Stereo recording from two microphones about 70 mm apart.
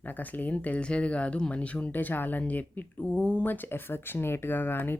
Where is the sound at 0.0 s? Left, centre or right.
Left.